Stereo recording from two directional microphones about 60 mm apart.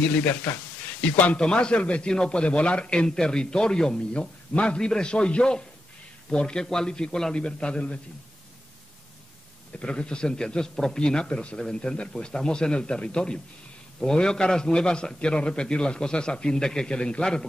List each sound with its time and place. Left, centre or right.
0.1 s a man's voice: left
9.7 s a man's voice: centre